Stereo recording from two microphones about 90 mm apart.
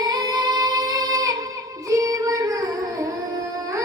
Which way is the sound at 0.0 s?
45° right (ahead or behind).